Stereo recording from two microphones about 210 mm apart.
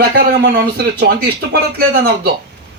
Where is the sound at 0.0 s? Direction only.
50° right (ahead or behind).